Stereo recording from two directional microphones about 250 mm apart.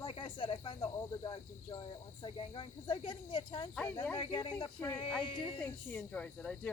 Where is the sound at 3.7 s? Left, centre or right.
Centre.